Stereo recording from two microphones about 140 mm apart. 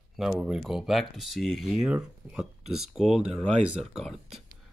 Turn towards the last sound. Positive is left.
turn(degrees=0)  # may be behind; listen again after turning